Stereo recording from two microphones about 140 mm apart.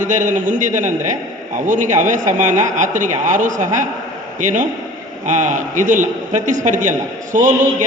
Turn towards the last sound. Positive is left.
turn(degrees=-65)  # may be behind; listen again after turning